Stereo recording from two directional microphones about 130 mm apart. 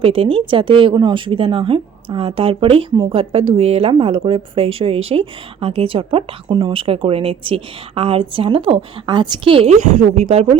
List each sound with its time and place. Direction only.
0.0 s a woman's voice: 45° right (ahead or behind)
9.6 s a woman's voice: 65° right (ahead or behind)